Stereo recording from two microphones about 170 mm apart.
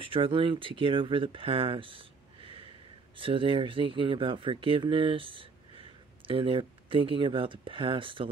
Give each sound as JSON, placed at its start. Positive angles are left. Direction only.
{"t": 0.0, "sound": "speech", "side_deg": -30}